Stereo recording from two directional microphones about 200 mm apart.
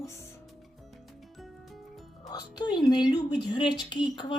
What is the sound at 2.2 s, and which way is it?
A woman's voice, 20° left (ahead or behind).